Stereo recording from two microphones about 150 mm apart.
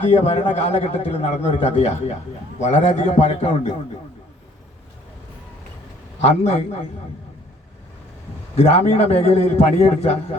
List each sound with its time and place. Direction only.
0.0 s a man's voice: 45° left (ahead or behind)
6.2 s a man's voice: 45° left (ahead or behind)
8.5 s a man's voice: 45° left (ahead or behind)